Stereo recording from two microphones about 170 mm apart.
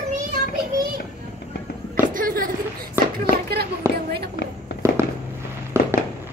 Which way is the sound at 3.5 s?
70° right (ahead or behind).